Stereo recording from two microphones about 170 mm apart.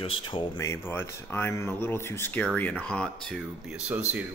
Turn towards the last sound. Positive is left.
turn(degrees=-10)  # may be behind; listen again after turning